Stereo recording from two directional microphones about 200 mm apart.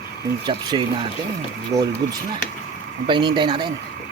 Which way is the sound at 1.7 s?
35° right (ahead or behind).